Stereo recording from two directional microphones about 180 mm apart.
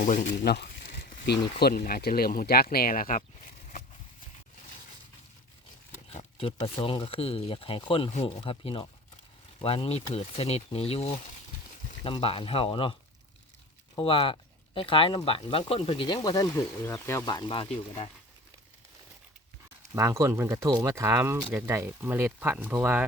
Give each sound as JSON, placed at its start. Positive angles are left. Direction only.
{"t": 0.0, "sound": "speech", "side_deg": 45}
{"t": 0.3, "sound": "a sound", "side_deg": 65}
{"t": 1.5, "sound": "speech", "side_deg": 55}
{"t": 6.1, "sound": "wild animals", "side_deg": 30}
{"t": 6.8, "sound": "speech", "side_deg": 30}
{"t": 14.0, "sound": "speech", "side_deg": 30}
{"t": 20.0, "sound": "speech", "side_deg": -15}